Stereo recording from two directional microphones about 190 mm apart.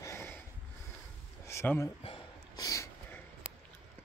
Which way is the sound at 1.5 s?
15° left (ahead or behind).